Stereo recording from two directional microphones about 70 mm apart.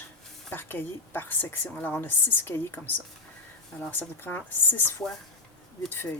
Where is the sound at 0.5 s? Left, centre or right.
Left.